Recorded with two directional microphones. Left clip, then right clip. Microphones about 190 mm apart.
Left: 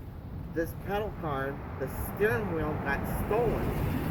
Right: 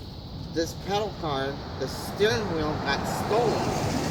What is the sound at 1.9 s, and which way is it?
Speech, 40° left (ahead or behind).